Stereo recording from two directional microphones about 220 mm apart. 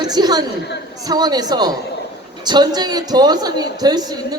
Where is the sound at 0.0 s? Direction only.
20° right (ahead or behind).